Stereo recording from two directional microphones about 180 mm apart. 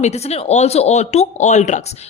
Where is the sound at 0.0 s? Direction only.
35° left (ahead or behind).